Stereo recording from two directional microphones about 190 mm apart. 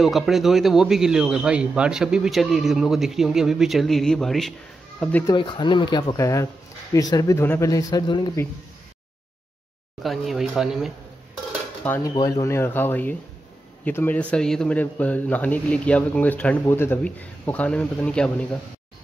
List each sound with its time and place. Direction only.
0.0 s a man's voice: centre (ahead or behind)
5.2 s speech: 25° left (ahead or behind)
10.0 s a man's voice: centre (ahead or behind)
11.8 s a man's voice: 10° left (ahead or behind)